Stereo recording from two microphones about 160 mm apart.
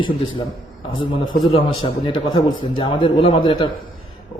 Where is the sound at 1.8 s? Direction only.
30° left (ahead or behind).